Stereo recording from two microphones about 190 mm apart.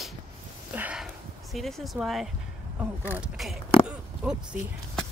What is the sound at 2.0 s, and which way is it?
Speech, centre (ahead or behind).